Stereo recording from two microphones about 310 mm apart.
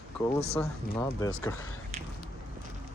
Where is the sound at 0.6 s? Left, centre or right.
Centre.